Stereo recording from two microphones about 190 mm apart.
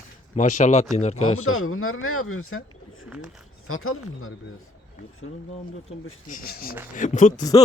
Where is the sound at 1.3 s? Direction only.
90° left.